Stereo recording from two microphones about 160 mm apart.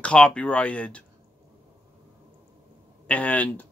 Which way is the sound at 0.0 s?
5° left (ahead or behind).